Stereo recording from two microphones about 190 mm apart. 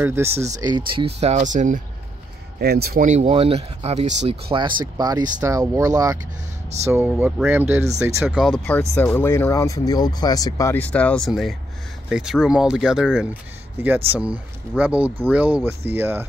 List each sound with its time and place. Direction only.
0.0 s speech: 15° right (ahead or behind)
0.3 s speech: 35° right (ahead or behind)
0.6 s speech: 20° right (ahead or behind); by 1.8 s 40° right (ahead or behind)
2.6 s speech: 55° right (ahead or behind); by 8.7 s centre (ahead or behind)
8.9 s speech: 10° left (ahead or behind); by 16.3 s 10° right (ahead or behind)